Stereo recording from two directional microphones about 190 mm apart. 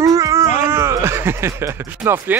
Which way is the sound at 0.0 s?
15° right (ahead or behind).